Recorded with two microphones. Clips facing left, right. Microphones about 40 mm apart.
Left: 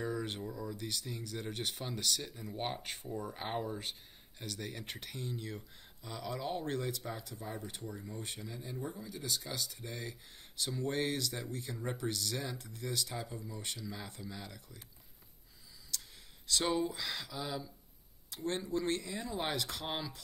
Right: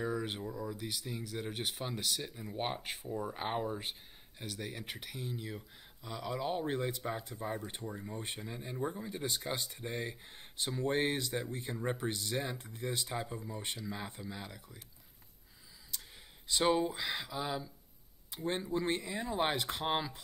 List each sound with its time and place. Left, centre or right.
0.0 s speech: centre
15.9 s clicking: right
16.4 s speech: centre